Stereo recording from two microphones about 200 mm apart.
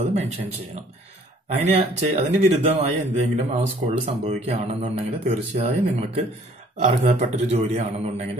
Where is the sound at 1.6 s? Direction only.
35° right (ahead or behind).